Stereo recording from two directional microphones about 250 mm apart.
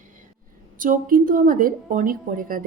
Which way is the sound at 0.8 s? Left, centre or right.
Right.